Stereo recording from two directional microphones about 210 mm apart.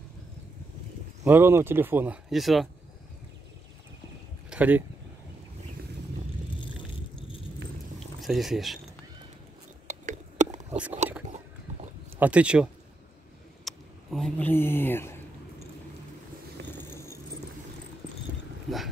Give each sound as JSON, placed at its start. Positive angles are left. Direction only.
{"t": 1.2, "sound": "speech", "side_deg": -10}
{"t": 4.5, "sound": "speech", "side_deg": -5}
{"t": 8.2, "sound": "speech", "side_deg": 0}
{"t": 9.8, "sound": "a sound", "side_deg": -35}
{"t": 12.2, "sound": "speech", "side_deg": -5}
{"t": 13.7, "sound": "speech", "side_deg": 0}
{"t": 16.7, "sound": "vehicle", "side_deg": 10}